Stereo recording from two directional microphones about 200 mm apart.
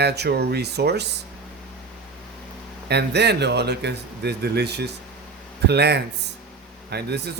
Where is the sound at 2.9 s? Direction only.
55° right (ahead or behind).